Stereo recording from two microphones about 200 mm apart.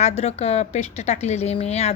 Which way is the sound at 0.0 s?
30° left (ahead or behind).